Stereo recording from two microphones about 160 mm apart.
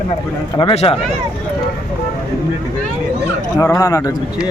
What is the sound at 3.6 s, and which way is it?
Speech, 20° left (ahead or behind).